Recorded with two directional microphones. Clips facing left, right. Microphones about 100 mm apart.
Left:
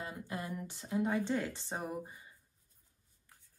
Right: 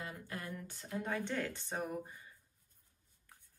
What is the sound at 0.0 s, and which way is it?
A woman's voice, 20° left (ahead or behind).